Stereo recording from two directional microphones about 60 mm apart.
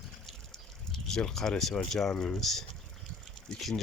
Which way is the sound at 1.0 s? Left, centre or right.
Centre.